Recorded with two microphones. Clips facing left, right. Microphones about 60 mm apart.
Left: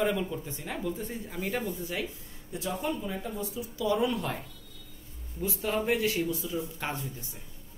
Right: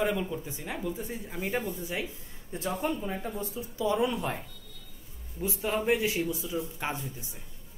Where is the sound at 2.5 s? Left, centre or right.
Right; by 7.3 s centre.